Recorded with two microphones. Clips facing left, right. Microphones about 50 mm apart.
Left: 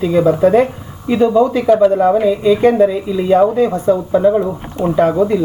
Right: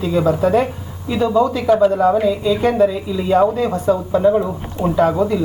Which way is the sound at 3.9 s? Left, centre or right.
Left.